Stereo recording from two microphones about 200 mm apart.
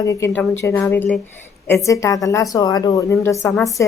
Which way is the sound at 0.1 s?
15° left (ahead or behind).